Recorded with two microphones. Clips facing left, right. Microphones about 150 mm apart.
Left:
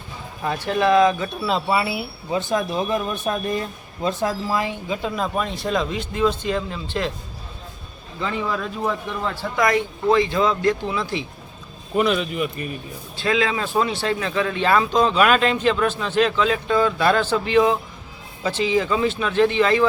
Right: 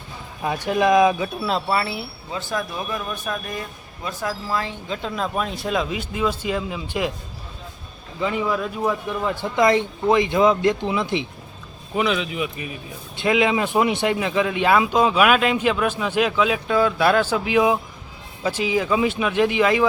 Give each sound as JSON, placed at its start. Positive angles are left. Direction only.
{"t": 0.4, "sound": "speech", "side_deg": -15}
{"t": 8.2, "sound": "speech", "side_deg": -10}
{"t": 11.9, "sound": "speech", "side_deg": 0}
{"t": 13.1, "sound": "speech", "side_deg": -20}